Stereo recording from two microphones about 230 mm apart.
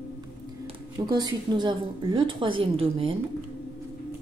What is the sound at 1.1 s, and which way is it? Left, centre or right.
A woman's voice, centre.